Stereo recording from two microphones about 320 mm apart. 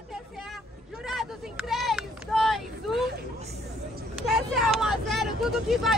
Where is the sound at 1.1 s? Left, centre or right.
Centre.